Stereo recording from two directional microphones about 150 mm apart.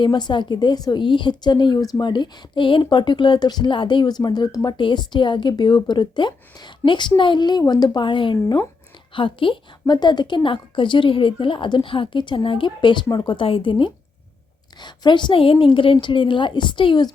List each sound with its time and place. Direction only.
0.0 s a woman's voice: 30° left (ahead or behind)